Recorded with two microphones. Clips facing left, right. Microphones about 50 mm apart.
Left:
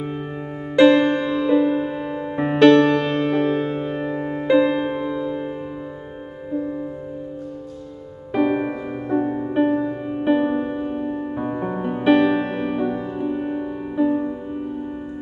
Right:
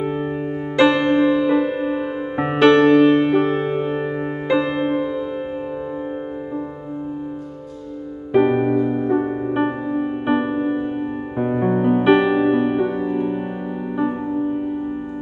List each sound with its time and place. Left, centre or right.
0.8 s music: centre
4.5 s music: centre
8.3 s music: centre
8.6 s music: centre
9.0 s music: centre
13.9 s music: centre